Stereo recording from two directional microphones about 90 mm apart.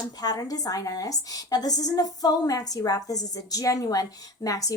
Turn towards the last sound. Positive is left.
turn(degrees=40)  # may be behind; listen again after turning